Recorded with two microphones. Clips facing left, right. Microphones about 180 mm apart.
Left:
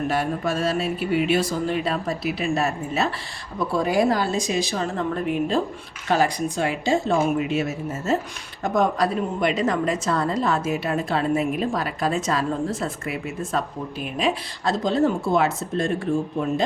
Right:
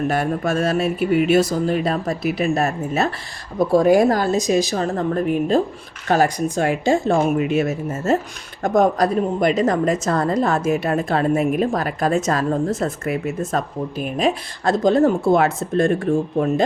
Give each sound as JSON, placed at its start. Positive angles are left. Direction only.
{"t": 0.1, "sound": "a woman's voice", "side_deg": -50}